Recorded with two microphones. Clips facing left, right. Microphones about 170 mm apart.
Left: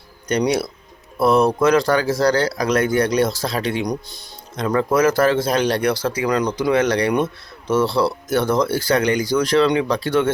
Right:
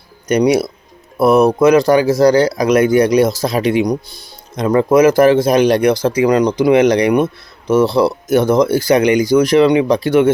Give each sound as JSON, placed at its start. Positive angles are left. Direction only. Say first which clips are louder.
{"t": 0.3, "sound": "speech", "louder": "right 6 dB", "side_deg": -10}